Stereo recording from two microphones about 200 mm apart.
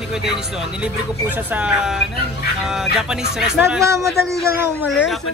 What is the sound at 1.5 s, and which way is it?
Speech, 5° right (ahead or behind).